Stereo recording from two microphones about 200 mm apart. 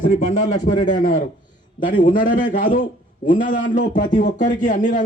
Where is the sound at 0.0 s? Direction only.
35° left (ahead or behind).